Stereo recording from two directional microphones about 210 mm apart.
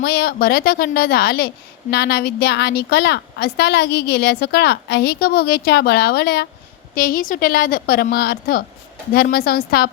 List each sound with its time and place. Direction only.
0.0 s a woman's voice: 50° left (ahead or behind)